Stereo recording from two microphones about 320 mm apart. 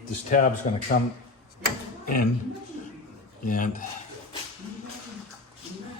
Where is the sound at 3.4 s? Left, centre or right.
Left.